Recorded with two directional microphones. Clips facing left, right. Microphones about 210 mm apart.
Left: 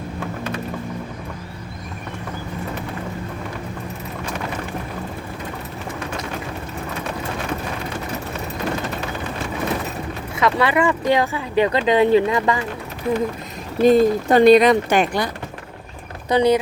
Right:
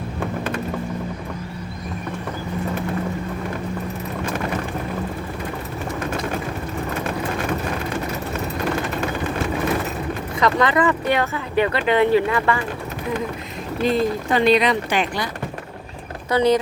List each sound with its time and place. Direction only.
10.4 s speech: 10° left (ahead or behind)
13.8 s speech: 45° left (ahead or behind)
16.3 s speech: 15° left (ahead or behind)